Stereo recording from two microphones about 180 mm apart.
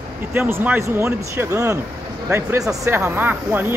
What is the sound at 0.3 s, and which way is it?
Speech, 10° right (ahead or behind).